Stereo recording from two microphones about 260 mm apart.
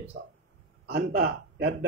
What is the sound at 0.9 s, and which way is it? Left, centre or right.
Speech, right.